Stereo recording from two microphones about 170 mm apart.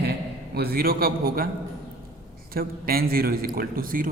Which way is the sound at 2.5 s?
60° right (ahead or behind).